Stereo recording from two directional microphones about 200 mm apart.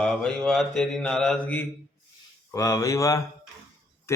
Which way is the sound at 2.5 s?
15° left (ahead or behind).